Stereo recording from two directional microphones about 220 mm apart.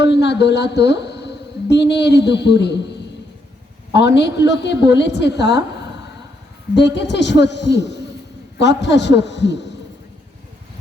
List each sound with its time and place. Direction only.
0.0 s a woman's voice: 50° left (ahead or behind)
6.7 s a woman's voice: 50° left (ahead or behind)